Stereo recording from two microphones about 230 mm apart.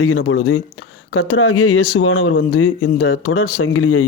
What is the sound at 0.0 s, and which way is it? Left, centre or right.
Speech, left.